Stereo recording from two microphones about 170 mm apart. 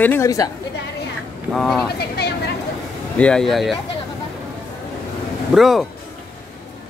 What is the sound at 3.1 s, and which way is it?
Speech, 5° left (ahead or behind).